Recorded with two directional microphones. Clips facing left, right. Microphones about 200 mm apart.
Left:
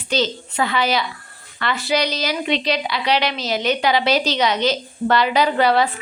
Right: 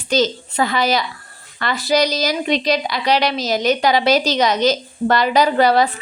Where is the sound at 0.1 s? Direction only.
40° right (ahead or behind).